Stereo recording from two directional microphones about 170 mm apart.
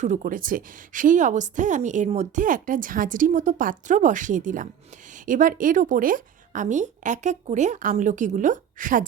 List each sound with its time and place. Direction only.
0.0 s a woman's voice: 45° right (ahead or behind)